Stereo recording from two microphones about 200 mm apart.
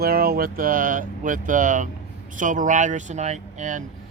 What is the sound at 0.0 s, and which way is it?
Speech, 50° right (ahead or behind).